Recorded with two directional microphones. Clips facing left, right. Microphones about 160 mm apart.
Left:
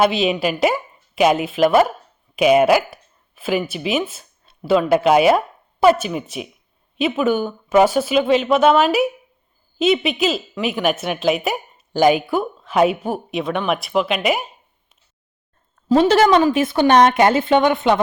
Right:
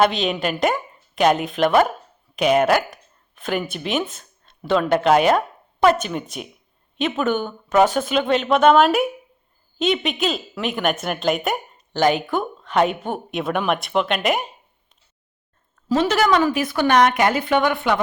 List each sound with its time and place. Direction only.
0.0 s a woman's voice: 5° left (ahead or behind)
15.9 s a woman's voice: 30° left (ahead or behind)